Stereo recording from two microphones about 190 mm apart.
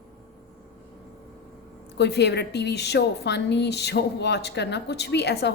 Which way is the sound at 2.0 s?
65° left (ahead or behind).